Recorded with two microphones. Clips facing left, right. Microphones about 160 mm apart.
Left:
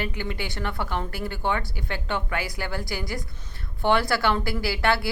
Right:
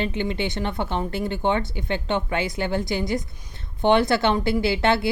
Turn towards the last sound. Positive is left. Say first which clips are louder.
# right 4 dB
turn(degrees=-20)  # may be behind; listen again after turning